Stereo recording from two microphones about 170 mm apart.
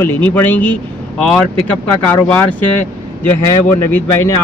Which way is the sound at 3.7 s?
15° left (ahead or behind).